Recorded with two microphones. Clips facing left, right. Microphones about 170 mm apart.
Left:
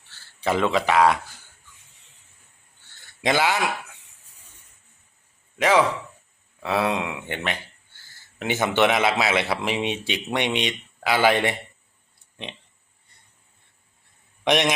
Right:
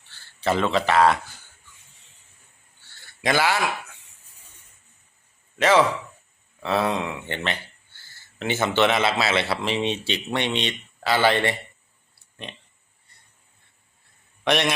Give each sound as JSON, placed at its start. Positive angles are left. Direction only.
{"t": 0.4, "sound": "a man's voice", "side_deg": 10}
{"t": 3.2, "sound": "speech", "side_deg": 20}
{"t": 5.5, "sound": "a man's voice", "side_deg": 10}
{"t": 14.4, "sound": "a man's voice", "side_deg": 15}